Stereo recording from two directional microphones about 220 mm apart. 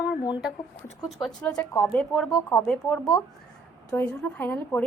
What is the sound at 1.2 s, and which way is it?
A woman's voice, centre (ahead or behind).